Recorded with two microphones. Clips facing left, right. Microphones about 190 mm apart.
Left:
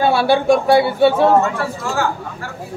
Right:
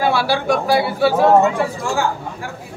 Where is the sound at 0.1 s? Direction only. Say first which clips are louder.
Left 4 dB; 25° left (ahead or behind).